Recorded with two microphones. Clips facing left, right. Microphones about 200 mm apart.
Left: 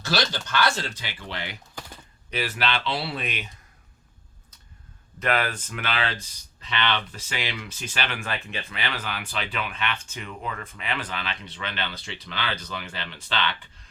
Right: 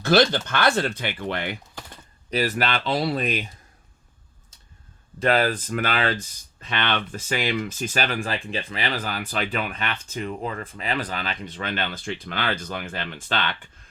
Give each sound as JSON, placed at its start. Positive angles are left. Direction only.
{"t": 0.0, "sound": "speech", "side_deg": -55}
{"t": 2.3, "sound": "speech", "side_deg": -40}
{"t": 5.2, "sound": "speech", "side_deg": -30}